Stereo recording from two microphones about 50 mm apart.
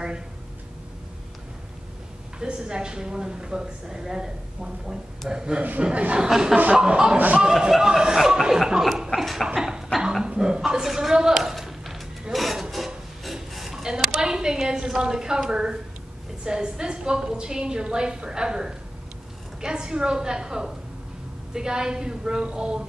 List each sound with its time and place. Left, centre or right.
2.3 s a woman's voice: centre
5.6 s a woman's voice: right
7.2 s speech: right
7.4 s a woman's voice: centre
9.1 s a sound: centre
15.5 s a woman's voice: centre